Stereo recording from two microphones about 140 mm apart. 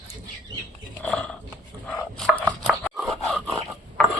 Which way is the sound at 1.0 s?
10° left (ahead or behind).